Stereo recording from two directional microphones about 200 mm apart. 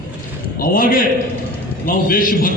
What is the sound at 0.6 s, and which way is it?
A man's voice, 45° left (ahead or behind).